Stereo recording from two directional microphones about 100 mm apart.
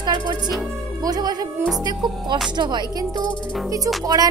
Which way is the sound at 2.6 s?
45° right (ahead or behind).